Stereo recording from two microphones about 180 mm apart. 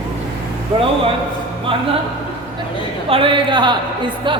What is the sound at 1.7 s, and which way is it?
Speech, 30° right (ahead or behind).